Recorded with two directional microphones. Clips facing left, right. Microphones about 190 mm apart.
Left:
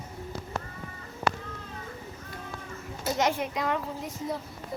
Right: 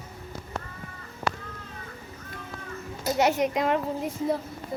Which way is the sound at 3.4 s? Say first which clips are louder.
Right 5 dB; 20° right (ahead or behind).